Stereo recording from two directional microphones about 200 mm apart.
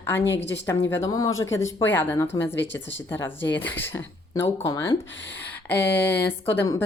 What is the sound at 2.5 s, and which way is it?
Speech, 65° left (ahead or behind).